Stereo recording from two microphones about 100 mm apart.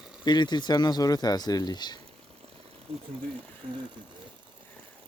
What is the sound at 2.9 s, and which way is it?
Speech, 70° right (ahead or behind).